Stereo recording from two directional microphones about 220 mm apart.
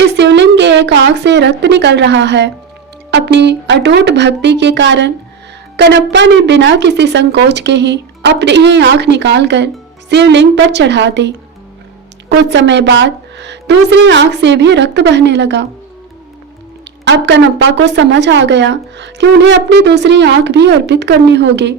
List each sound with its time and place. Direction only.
0.0 s a sound: 50° right (ahead or behind)
3.1 s speech: 50° right (ahead or behind)
17.1 s speech: 50° right (ahead or behind)